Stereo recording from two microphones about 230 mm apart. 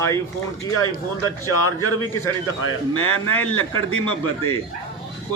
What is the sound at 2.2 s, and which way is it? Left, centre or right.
A man's voice, left.